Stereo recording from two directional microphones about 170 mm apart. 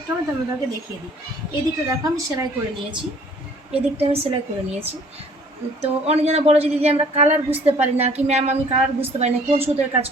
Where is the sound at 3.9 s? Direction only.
35° right (ahead or behind).